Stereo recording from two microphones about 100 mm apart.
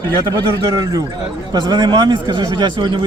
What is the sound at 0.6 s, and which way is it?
Speech, 35° right (ahead or behind).